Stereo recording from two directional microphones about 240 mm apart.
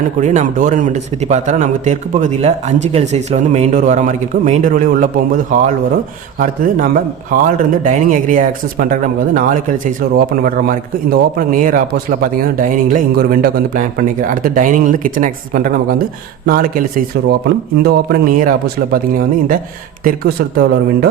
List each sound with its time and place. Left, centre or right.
0.2 s a man's voice: right
17.8 s speech: right
20.1 s speech: right